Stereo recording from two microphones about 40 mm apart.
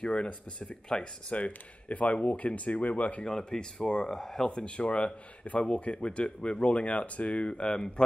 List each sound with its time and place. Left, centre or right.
0.0 s speech: left
1.3 s a man's voice: left
3.3 s speech: centre
4.5 s a man's voice: left